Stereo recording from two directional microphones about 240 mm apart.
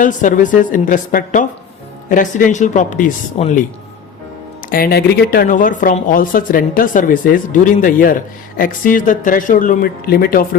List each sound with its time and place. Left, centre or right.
0.0 s speech: left
4.7 s speech: left